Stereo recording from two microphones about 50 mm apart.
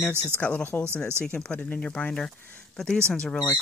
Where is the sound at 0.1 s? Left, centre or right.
Right.